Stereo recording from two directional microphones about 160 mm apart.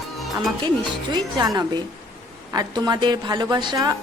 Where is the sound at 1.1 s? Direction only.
25° right (ahead or behind).